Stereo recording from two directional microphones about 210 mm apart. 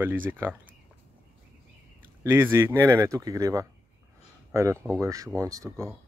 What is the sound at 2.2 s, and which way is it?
Speech, 10° right (ahead or behind).